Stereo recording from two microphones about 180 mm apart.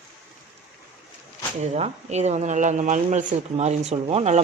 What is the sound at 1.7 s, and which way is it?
Speech, 40° right (ahead or behind).